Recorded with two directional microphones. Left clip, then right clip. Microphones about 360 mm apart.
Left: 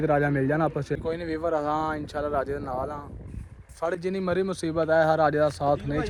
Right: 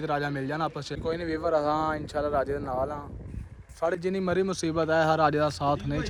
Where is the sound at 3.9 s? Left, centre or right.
Centre.